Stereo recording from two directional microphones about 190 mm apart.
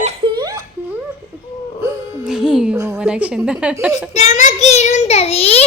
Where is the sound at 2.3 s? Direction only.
5° right (ahead or behind).